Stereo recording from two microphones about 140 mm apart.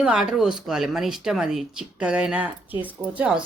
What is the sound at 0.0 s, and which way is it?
Speech, 5° right (ahead or behind).